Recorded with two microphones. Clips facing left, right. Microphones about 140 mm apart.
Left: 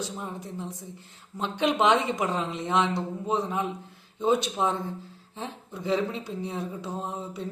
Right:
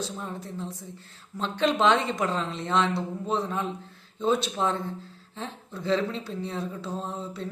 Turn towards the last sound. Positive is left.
turn(degrees=15)  # may be behind; listen again after turning